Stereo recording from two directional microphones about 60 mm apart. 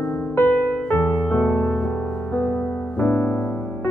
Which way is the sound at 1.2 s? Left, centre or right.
Centre.